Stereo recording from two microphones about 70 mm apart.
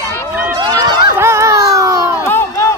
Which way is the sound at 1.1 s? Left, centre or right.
Right.